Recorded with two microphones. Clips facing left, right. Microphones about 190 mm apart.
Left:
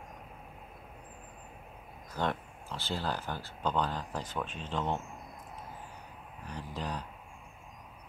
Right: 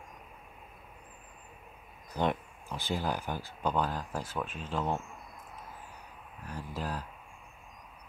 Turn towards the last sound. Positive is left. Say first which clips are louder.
# right 1 dB
turn(degrees=-5)  # may be behind; listen again after turning